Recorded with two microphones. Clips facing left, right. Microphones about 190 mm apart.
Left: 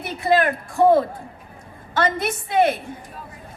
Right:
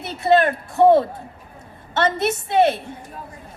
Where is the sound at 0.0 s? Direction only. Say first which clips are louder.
Right 2 dB; 25° right (ahead or behind).